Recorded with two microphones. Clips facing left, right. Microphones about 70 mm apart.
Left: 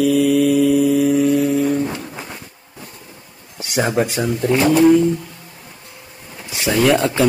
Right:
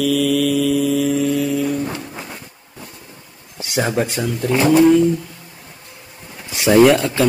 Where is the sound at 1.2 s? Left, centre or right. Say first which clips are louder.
Left 3 dB; left.